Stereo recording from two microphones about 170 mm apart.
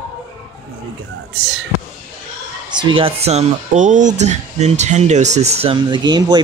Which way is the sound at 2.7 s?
30° right (ahead or behind).